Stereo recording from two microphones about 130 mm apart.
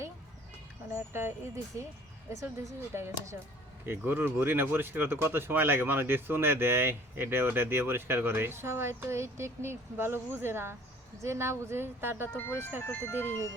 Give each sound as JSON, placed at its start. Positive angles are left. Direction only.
{"t": 0.9, "sound": "speech", "side_deg": -20}
{"t": 2.9, "sound": "speech", "side_deg": -20}
{"t": 12.3, "sound": "speech", "side_deg": 15}